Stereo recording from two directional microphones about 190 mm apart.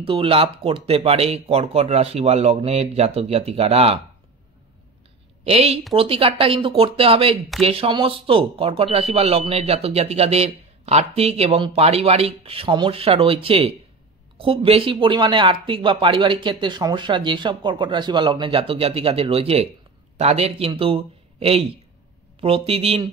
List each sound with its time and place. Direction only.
0.0 s speech: 30° right (ahead or behind)
5.4 s a woman's voice: 30° right (ahead or behind)